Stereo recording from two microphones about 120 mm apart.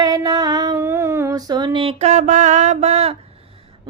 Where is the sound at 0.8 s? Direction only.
20° right (ahead or behind); by 3.2 s 60° right (ahead or behind).